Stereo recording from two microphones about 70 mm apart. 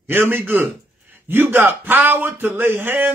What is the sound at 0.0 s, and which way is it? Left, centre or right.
A man's voice, right.